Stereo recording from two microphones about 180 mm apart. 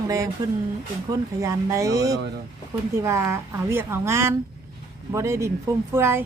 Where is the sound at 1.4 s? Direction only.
15° right (ahead or behind).